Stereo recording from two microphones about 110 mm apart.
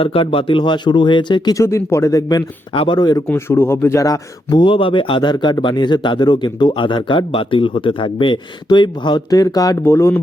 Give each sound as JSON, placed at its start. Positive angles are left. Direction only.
{"t": 0.0, "sound": "speech", "side_deg": 55}
{"t": 1.5, "sound": "speech", "side_deg": 25}
{"t": 2.7, "sound": "speech", "side_deg": 50}
{"t": 3.0, "sound": "speech", "side_deg": 40}
{"t": 3.2, "sound": "speech", "side_deg": 20}
{"t": 4.6, "sound": "speech", "side_deg": 50}